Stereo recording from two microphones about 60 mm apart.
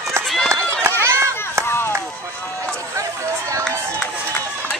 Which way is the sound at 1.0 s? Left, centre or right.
Right.